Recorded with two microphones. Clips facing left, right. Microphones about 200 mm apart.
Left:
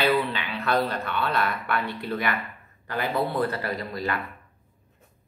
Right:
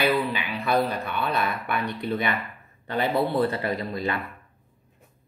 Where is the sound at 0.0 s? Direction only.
10° right (ahead or behind).